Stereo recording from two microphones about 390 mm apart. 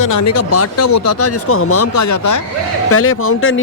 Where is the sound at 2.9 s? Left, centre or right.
Left.